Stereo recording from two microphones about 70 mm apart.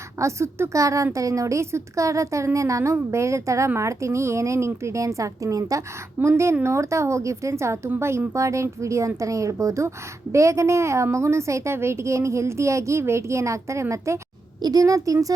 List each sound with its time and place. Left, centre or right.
0.2 s a woman's voice: right
14.6 s speech: right